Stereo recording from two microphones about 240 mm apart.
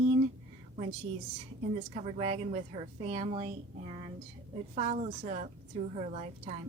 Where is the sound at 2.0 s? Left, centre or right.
Right.